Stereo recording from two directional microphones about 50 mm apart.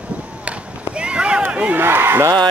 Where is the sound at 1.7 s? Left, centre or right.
Right.